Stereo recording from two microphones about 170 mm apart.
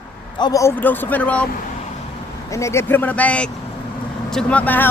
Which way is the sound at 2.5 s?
15° left (ahead or behind).